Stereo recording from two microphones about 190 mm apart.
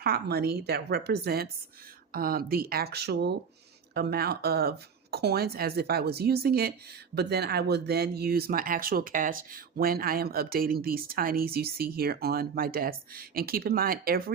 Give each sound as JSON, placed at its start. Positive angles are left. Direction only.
{"t": 0.0, "sound": "speech", "side_deg": -55}